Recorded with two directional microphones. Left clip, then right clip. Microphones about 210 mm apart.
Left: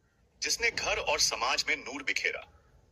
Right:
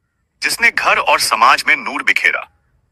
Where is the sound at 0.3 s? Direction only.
45° right (ahead or behind).